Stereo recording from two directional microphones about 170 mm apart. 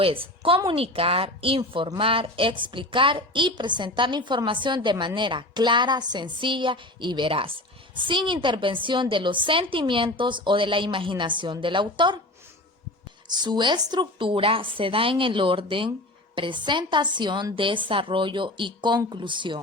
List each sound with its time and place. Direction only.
0.0 s a woman's voice: 30° right (ahead or behind)
13.2 s a woman's voice: 25° right (ahead or behind)